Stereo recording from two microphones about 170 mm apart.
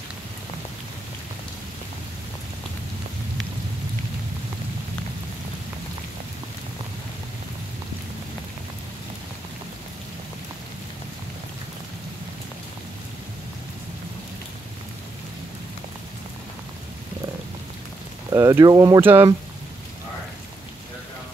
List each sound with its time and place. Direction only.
18.3 s speech: 20° right (ahead or behind)